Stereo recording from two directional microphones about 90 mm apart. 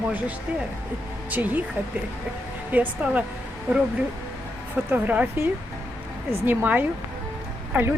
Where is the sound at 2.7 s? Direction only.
15° right (ahead or behind).